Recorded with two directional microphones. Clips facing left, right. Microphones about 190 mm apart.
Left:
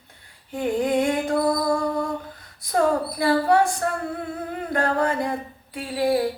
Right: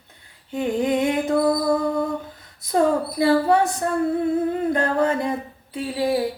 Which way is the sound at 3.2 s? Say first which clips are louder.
Right 2 dB; 25° right (ahead or behind).